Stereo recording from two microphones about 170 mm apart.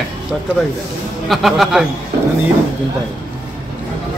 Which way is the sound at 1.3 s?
Centre (ahead or behind).